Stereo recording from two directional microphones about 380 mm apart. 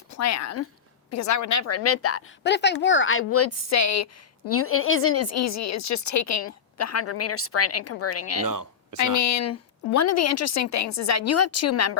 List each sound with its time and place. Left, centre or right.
0.1 s speech: left
8.4 s speech: right
9.0 s speech: left